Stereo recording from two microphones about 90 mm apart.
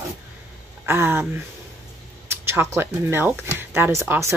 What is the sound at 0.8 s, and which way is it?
Speech, 25° right (ahead or behind).